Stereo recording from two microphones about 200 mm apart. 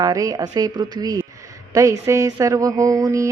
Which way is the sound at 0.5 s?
20° right (ahead or behind).